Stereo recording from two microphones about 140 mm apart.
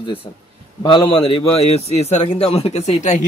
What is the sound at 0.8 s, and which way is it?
A man's voice, 35° left (ahead or behind).